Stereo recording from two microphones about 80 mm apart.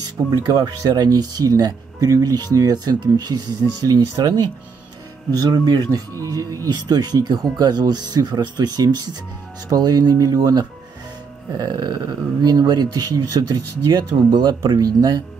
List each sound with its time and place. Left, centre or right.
0.3 s speech: right
5.3 s speech: right
14.8 s speech: right